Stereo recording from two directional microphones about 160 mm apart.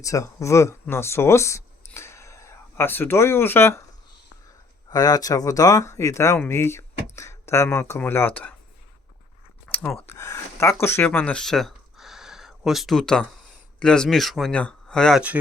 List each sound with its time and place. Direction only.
0.0 s speech: 20° left (ahead or behind)
4.9 s speech: 25° left (ahead or behind)
9.7 s speech: centre (ahead or behind)
10.1 s speech: 20° left (ahead or behind)